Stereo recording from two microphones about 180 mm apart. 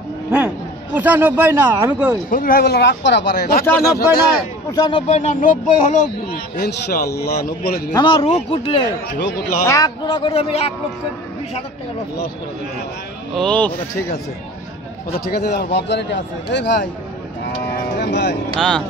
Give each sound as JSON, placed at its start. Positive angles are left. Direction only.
{"t": 0.9, "sound": "speech", "side_deg": -10}
{"t": 2.3, "sound": "speech", "side_deg": 55}
{"t": 4.1, "sound": "speech", "side_deg": 20}
{"t": 5.0, "sound": "speech", "side_deg": 40}
{"t": 7.9, "sound": "speech", "side_deg": 25}
{"t": 9.7, "sound": "speech", "side_deg": 20}
{"t": 13.4, "sound": "speech", "side_deg": 5}
{"t": 15.1, "sound": "a man's voice", "side_deg": 60}
{"t": 17.9, "sound": "vehicle", "side_deg": 65}
{"t": 18.6, "sound": "speech", "side_deg": 5}